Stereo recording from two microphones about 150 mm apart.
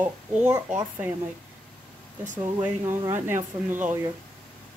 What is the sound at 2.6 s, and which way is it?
Speech, 15° right (ahead or behind).